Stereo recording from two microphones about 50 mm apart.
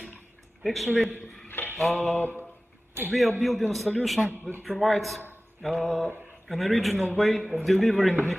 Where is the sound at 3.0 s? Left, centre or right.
Right.